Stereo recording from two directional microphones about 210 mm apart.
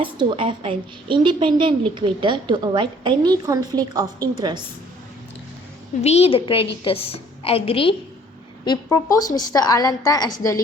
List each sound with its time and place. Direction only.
0.0 s a woman's voice: 25° right (ahead or behind)
6.0 s a woman's voice: 30° left (ahead or behind)